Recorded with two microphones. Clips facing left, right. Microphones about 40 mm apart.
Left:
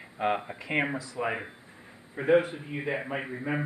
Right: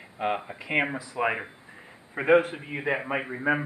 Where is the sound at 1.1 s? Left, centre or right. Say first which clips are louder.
Right 4 dB; right.